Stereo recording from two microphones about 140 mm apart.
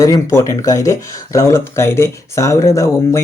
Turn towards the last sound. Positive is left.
turn(degrees=20)  # may be behind; listen again after turning